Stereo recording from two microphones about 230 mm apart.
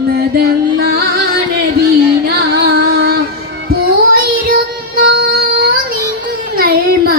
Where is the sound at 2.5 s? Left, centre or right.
Right.